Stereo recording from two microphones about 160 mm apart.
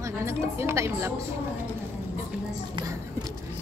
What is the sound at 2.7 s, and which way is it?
Speech, 20° right (ahead or behind).